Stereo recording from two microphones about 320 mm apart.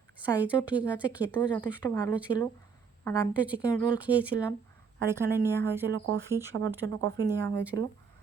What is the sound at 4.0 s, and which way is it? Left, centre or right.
Speech, centre.